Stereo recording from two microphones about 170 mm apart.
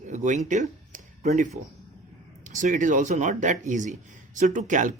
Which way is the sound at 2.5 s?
50° right (ahead or behind).